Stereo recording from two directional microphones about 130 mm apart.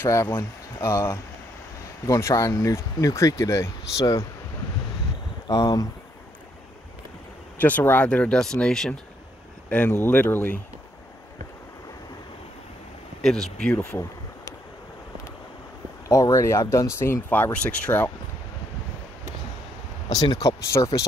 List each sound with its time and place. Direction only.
0.0 s speech: 20° left (ahead or behind)
5.5 s speech: 25° left (ahead or behind)
7.5 s speech: 15° left (ahead or behind)
13.2 s speech: 5° left (ahead or behind)
16.1 s speech: 25° left (ahead or behind)
20.1 s speech: 30° left (ahead or behind)